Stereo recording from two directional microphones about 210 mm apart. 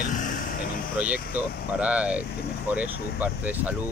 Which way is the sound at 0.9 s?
5° right (ahead or behind).